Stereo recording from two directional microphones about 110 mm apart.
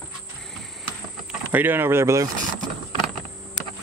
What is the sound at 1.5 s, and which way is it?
Speech, 15° right (ahead or behind).